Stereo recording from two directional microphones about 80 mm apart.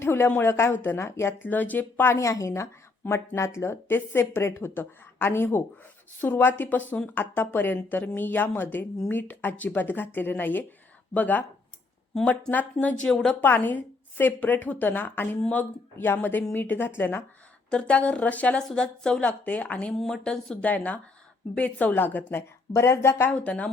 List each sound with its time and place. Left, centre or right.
0.0 s speech: left
2.2 s speech: left
17.7 s speech: centre; by 23.3 s left
23.3 s speech: centre